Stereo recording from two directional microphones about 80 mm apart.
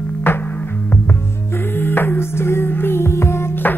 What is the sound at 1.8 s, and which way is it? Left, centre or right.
Music, left.